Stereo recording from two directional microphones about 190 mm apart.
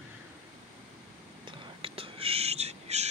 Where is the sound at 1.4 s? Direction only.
30° right (ahead or behind).